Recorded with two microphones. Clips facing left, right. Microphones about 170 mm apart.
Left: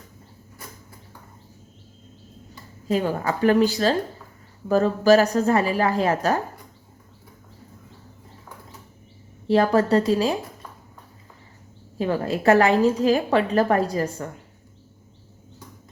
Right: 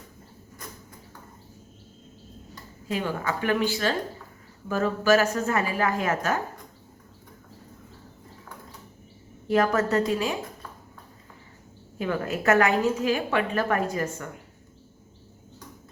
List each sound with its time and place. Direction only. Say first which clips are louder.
2.8 s a woman's voice: left 5 dB; 40° left (ahead or behind)
9.5 s a woman's voice: left 4 dB; 30° left (ahead or behind)
11.9 s a woman's voice: left 4 dB; 30° left (ahead or behind)